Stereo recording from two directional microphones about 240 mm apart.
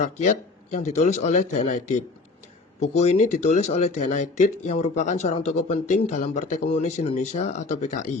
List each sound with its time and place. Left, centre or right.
0.0 s speech: left